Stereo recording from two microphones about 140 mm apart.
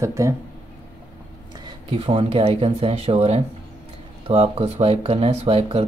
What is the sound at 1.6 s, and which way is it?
Speech, 40° right (ahead or behind).